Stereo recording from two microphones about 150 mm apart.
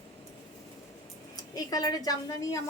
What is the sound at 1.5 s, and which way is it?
A woman's voice, 25° left (ahead or behind).